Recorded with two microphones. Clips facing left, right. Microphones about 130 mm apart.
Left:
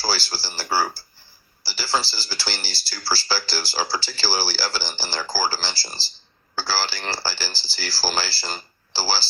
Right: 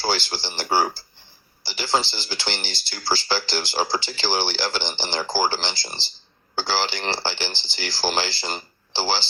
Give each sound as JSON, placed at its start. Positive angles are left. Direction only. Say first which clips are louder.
{"t": 0.0, "sound": "speech", "louder": "right 2 dB", "side_deg": -20}